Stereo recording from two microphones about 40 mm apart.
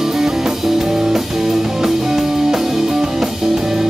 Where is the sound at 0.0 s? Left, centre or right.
Centre.